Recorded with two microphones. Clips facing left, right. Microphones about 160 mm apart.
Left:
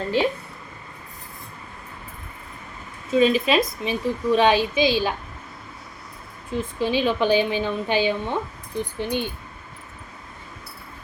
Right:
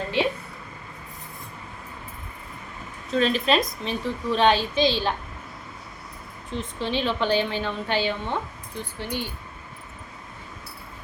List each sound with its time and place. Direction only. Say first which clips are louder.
3.1 s a woman's voice: left 3 dB; 10° left (ahead or behind)
6.5 s a woman's voice: left 4 dB; 10° left (ahead or behind)